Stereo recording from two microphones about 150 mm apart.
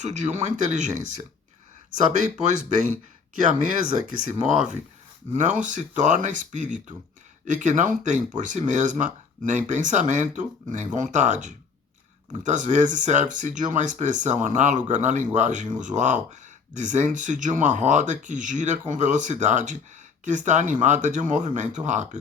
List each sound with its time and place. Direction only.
0.0 s speech: 50° right (ahead or behind)
4.2 s speech: 55° right (ahead or behind)